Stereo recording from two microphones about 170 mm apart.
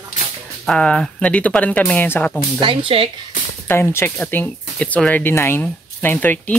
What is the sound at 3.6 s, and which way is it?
Speech, 15° left (ahead or behind).